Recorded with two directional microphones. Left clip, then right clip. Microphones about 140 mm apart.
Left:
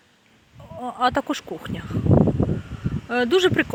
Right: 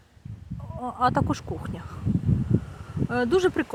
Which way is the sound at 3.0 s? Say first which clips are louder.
Left 4 dB; 5° left (ahead or behind).